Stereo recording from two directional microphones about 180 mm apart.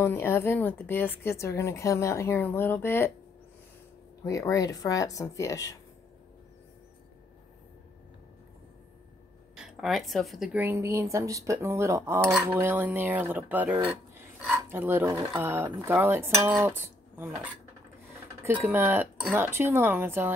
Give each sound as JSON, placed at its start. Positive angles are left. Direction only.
{"t": 0.0, "sound": "a woman's voice", "side_deg": 15}
{"t": 4.2, "sound": "speech", "side_deg": 20}
{"t": 9.8, "sound": "speech", "side_deg": 0}
{"t": 13.8, "sound": "a sound", "side_deg": -5}
{"t": 14.7, "sound": "speech", "side_deg": -10}